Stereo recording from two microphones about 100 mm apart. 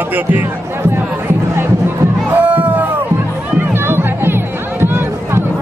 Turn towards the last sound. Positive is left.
turn(degrees=-25)  # may be behind; listen again after turning